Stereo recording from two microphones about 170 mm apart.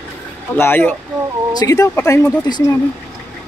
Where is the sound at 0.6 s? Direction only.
10° left (ahead or behind).